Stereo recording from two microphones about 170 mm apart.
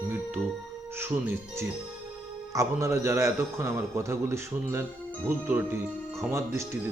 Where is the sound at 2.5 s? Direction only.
20° right (ahead or behind).